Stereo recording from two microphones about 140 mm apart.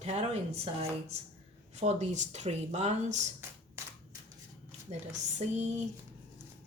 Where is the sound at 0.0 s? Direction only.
50° right (ahead or behind).